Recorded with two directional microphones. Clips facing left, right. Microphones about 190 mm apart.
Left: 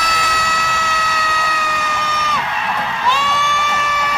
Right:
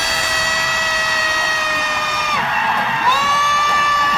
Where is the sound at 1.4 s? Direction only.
20° right (ahead or behind).